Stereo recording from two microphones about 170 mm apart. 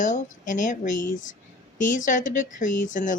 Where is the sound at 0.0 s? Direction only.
45° left (ahead or behind).